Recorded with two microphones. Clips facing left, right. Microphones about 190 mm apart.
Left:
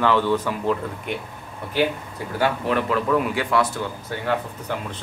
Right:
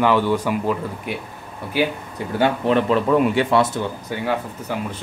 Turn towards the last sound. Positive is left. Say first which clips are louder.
# right 1 dB
turn(degrees=-10)  # may be behind; listen again after turning